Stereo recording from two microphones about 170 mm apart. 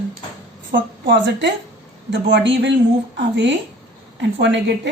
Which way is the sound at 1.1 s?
90° right.